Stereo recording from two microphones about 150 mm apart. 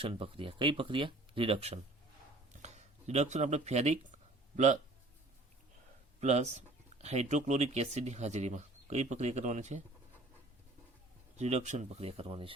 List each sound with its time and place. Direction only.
0.0 s speech: 35° right (ahead or behind)
2.5 s a sound: 50° right (ahead or behind)
4.5 s speech: 55° right (ahead or behind)
6.1 s speech: 50° right (ahead or behind)
11.3 s speech: 50° right (ahead or behind)